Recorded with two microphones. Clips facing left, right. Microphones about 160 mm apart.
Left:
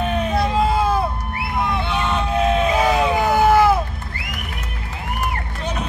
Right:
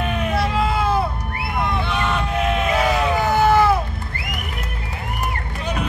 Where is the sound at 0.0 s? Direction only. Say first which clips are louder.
Left 2 dB; 20° left (ahead or behind).